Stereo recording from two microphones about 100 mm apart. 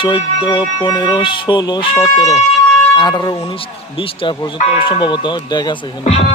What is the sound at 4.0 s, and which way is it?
Mantra, 60° left (ahead or behind).